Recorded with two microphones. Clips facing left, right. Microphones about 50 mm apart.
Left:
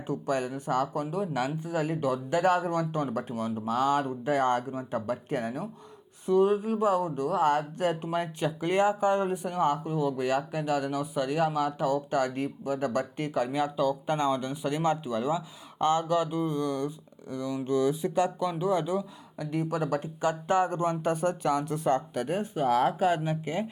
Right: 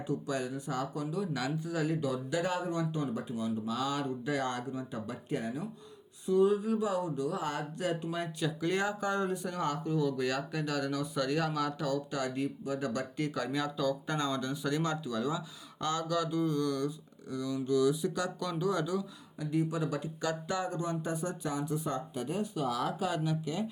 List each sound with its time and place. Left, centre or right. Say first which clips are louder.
0.1 s speech: left 5 dB; left
12.1 s speech: left 6 dB; left
18.3 s speech: left 5 dB; left
19.4 s speech: left 2 dB; left
22.4 s speech: left 8 dB; left